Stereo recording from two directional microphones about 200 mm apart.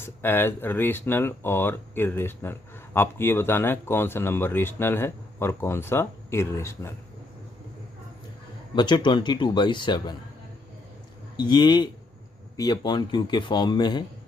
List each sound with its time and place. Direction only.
0.0 s speech: 10° left (ahead or behind)
8.7 s a man's voice: 25° left (ahead or behind)
11.3 s a man's voice: 20° left (ahead or behind)